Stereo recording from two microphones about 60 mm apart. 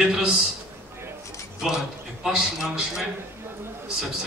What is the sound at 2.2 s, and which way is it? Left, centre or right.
Speech, centre.